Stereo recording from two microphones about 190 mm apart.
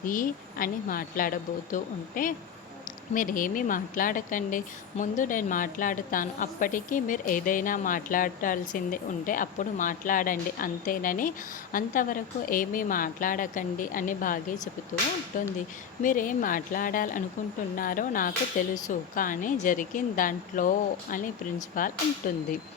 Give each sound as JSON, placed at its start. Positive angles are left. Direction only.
{"t": 0.0, "sound": "a woman's voice", "side_deg": 45}